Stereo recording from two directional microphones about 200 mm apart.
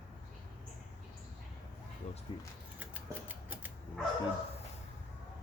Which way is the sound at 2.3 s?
25° left (ahead or behind).